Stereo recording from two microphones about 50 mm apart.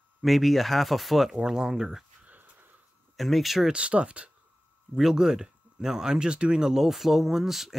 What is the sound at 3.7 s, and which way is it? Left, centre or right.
Speech, right.